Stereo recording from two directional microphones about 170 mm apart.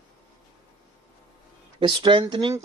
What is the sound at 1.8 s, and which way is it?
Speech, 30° right (ahead or behind).